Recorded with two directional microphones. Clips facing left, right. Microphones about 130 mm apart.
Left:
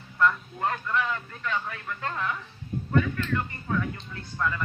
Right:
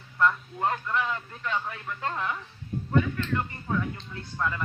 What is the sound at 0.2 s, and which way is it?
Speech, 15° right (ahead or behind).